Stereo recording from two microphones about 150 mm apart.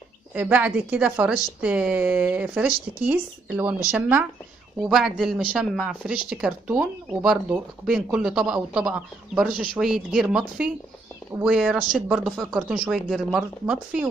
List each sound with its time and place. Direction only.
0.3 s a woman's voice: 10° right (ahead or behind)
4.8 s speech: centre (ahead or behind)